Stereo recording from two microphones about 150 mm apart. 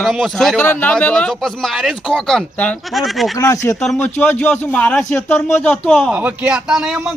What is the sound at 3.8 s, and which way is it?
Speech, 5° left (ahead or behind).